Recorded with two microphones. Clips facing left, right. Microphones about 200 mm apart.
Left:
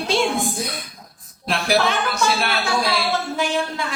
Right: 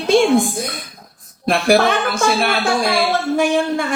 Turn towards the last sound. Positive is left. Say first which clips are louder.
# right 7 dB
turn(degrees=-50)  # may be behind; listen again after turning